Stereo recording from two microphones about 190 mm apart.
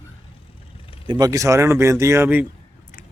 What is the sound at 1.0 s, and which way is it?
Speech, 20° right (ahead or behind).